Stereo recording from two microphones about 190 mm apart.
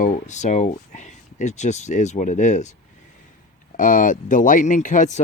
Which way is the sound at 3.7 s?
45° left (ahead or behind).